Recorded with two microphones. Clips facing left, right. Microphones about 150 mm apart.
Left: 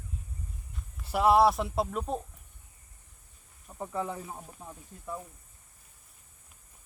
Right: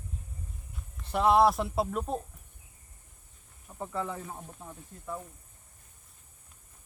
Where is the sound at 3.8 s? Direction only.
15° left (ahead or behind).